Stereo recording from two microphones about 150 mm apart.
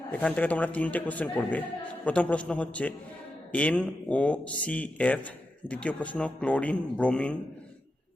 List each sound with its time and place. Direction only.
0.1 s speech: 10° left (ahead or behind)